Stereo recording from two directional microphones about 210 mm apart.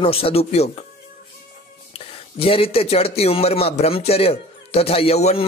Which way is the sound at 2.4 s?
25° left (ahead or behind).